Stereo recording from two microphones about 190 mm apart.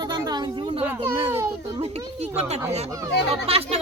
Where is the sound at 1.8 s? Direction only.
35° right (ahead or behind).